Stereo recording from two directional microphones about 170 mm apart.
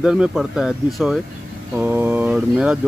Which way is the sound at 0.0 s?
5° right (ahead or behind).